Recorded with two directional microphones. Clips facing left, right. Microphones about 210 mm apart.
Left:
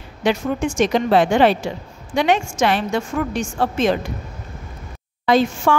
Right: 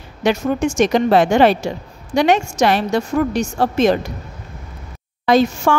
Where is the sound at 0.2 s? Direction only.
45° right (ahead or behind).